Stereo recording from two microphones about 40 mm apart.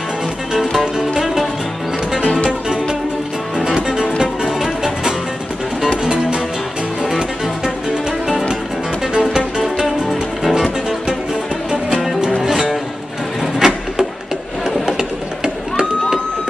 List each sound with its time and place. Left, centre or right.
0.5 s music: centre
1.2 s music: centre
3.6 s music: centre
7.0 s music: centre
9.0 s music: centre
9.6 s music: centre
12.4 s music: centre
13.4 s a sound: centre